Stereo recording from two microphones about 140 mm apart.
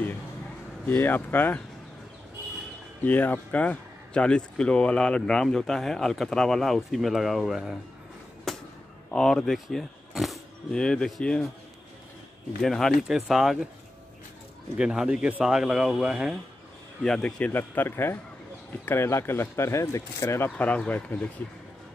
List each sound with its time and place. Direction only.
0.8 s speech: 15° left (ahead or behind)
3.0 s a man's voice: 10° left (ahead or behind)
8.5 s fireworks: centre (ahead or behind)
9.1 s speech: 5° left (ahead or behind)
12.6 s a man's voice: 5° left (ahead or behind)
14.8 s a man's voice: 5° right (ahead or behind)
17.0 s speech: 5° left (ahead or behind)